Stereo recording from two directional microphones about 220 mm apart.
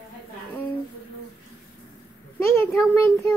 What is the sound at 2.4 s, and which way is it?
Speech, 10° left (ahead or behind).